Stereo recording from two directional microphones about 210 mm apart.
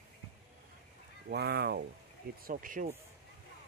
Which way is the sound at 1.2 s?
50° right (ahead or behind).